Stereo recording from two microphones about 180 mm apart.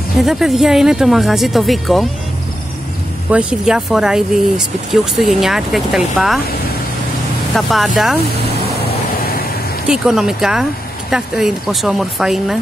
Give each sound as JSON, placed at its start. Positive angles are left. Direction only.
{"t": 0.2, "sound": "speech", "side_deg": 0}
{"t": 3.3, "sound": "speech", "side_deg": -5}
{"t": 7.5, "sound": "speech", "side_deg": 0}
{"t": 9.1, "sound": "vehicle", "side_deg": 55}
{"t": 9.8, "sound": "speech", "side_deg": -5}